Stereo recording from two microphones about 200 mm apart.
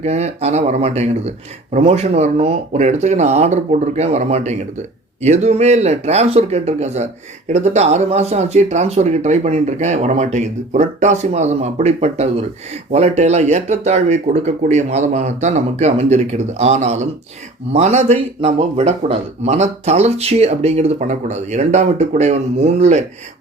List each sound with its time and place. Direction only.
0.0 s speech: 35° right (ahead or behind)